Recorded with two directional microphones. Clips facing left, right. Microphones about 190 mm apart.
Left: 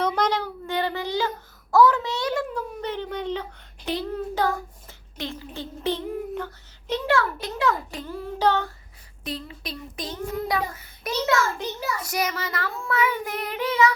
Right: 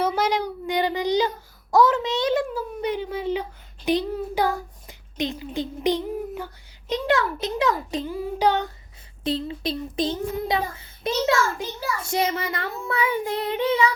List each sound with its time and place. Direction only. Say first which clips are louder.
0.0 s child singing: right 1 dB; 5° right (ahead or behind)
2.6 s a child's voice: right 3 dB; 10° right (ahead or behind)
6.9 s child singing: right 1 dB; 20° right (ahead or behind)
9.2 s child singing: right 8 dB; 25° right (ahead or behind)